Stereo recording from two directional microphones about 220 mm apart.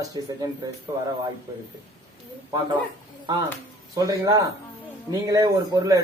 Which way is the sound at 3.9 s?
15° right (ahead or behind).